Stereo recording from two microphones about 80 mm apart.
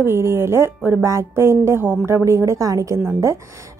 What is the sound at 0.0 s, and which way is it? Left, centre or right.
A woman's voice, right.